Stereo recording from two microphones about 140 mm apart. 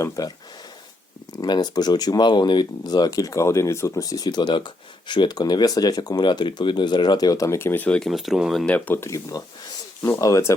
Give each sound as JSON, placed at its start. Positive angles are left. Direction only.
{"t": 0.0, "sound": "speech", "side_deg": 25}
{"t": 8.6, "sound": "speech", "side_deg": 10}